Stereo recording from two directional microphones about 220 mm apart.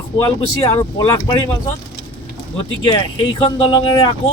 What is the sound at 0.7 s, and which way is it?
Speech, 20° left (ahead or behind).